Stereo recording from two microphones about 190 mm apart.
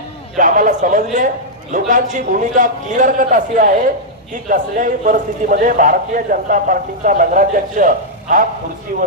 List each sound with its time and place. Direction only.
0.3 s a man's voice: 45° right (ahead or behind)